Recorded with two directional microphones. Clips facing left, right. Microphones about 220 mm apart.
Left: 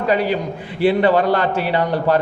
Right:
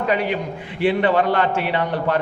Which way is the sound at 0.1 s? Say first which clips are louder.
Left 5 dB; 35° left (ahead or behind).